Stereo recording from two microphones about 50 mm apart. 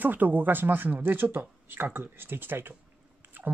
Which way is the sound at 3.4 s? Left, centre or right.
Right.